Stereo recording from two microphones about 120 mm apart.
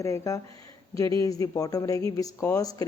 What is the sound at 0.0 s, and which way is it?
Speech, 25° left (ahead or behind).